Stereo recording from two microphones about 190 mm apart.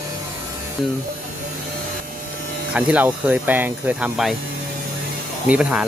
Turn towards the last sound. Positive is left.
turn(degrees=-5)  # may be behind; listen again after turning